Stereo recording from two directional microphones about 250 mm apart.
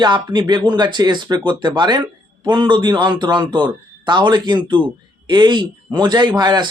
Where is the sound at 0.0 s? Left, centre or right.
Centre.